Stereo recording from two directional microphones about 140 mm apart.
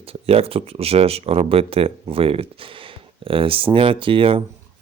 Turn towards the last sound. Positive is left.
turn(degrees=-40)  # may be behind; listen again after turning